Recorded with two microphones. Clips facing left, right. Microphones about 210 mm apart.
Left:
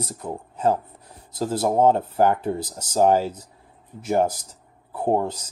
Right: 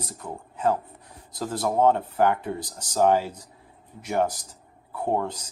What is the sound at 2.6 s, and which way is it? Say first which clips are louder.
Speech: left 5 dB; 5° left (ahead or behind).